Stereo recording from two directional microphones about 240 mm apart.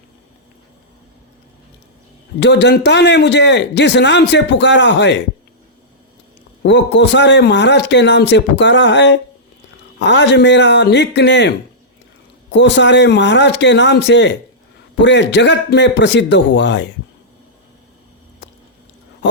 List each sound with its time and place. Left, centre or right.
2.4 s a man's voice: left
6.6 s a man's voice: left